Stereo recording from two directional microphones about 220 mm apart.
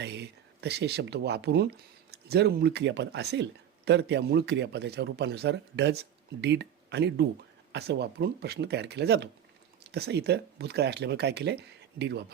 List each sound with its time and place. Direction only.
0.0 s speech: 50° right (ahead or behind)